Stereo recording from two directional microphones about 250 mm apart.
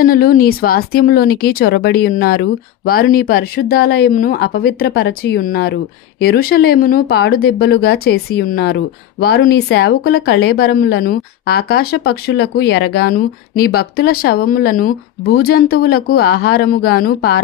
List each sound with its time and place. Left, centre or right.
0.0 s speech: left